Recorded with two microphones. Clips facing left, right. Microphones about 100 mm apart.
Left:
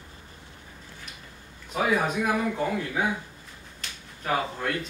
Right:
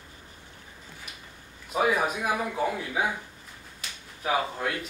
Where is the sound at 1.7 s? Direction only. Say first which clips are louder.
Even; 5° right (ahead or behind).